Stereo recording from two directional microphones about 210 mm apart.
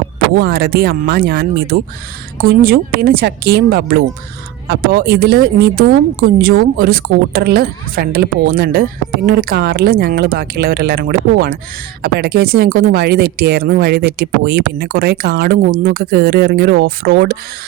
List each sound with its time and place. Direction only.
0.3 s speech: 50° right (ahead or behind)